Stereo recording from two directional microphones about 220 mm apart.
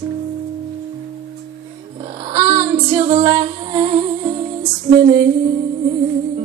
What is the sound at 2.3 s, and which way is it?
Female singing, 25° right (ahead or behind).